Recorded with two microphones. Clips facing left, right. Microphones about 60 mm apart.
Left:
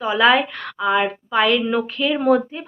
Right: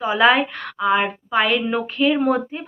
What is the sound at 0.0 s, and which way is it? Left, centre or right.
Speech, centre.